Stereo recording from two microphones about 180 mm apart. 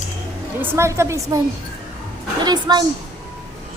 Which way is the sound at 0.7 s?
15° right (ahead or behind).